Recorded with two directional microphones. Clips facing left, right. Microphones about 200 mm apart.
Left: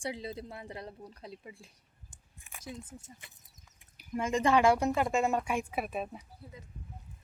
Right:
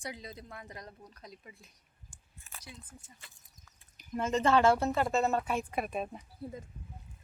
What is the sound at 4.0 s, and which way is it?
Speech, 10° left (ahead or behind).